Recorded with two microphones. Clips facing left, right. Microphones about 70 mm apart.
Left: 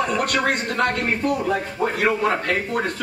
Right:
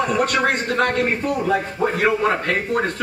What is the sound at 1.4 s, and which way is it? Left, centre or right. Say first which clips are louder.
Speech: right 2 dB; right.